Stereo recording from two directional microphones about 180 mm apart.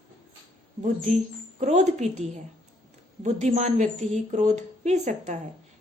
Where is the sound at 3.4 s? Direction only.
40° right (ahead or behind).